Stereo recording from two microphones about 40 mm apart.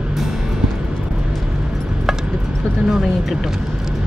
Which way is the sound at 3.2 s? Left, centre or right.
Centre.